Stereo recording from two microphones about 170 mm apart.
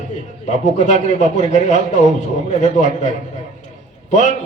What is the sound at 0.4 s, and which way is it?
A man's voice, 45° left (ahead or behind).